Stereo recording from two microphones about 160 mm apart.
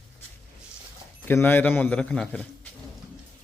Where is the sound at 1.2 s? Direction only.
15° left (ahead or behind).